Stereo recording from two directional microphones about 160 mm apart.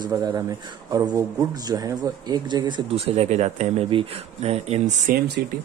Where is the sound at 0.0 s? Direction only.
20° right (ahead or behind); by 4.9 s 40° right (ahead or behind).